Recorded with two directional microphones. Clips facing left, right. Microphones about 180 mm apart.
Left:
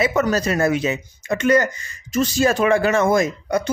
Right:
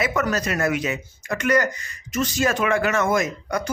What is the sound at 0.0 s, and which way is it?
Speech, 25° left (ahead or behind).